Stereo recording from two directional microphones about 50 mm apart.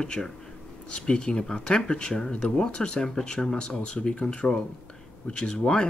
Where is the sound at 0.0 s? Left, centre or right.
Centre.